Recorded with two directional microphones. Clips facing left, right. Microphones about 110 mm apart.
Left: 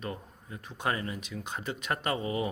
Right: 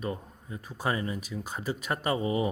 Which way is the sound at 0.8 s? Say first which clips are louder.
Right 2 dB; 20° right (ahead or behind).